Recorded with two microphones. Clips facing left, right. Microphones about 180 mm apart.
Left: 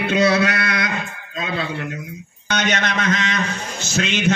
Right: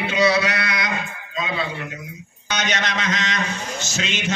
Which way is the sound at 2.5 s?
55° left (ahead or behind).